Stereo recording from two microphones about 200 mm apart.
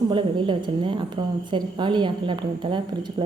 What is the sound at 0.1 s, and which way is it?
A woman's voice, 25° right (ahead or behind).